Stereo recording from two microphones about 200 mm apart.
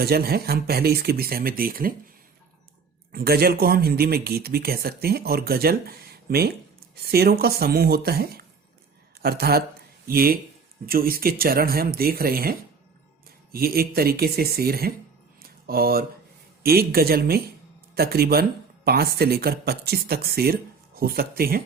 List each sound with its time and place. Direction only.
0.0 s speech: 50° right (ahead or behind)
3.1 s speech: 50° right (ahead or behind)
15.4 s a sound: 50° right (ahead or behind)
16.6 s speech: 50° right (ahead or behind)